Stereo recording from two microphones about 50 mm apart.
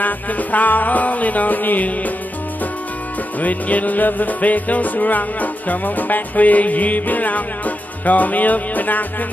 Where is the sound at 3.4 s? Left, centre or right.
Left.